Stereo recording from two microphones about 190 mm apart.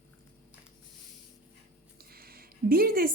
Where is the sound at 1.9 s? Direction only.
50° right (ahead or behind).